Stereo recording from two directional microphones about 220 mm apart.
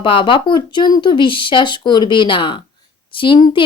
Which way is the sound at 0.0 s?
20° left (ahead or behind).